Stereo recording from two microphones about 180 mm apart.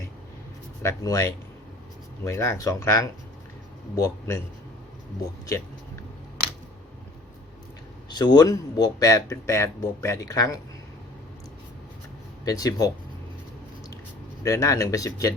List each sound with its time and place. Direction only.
0.8 s speech: 15° left (ahead or behind)
8.1 s speech: 20° left (ahead or behind)
12.5 s speech: 20° left (ahead or behind)
14.4 s speech: 15° left (ahead or behind)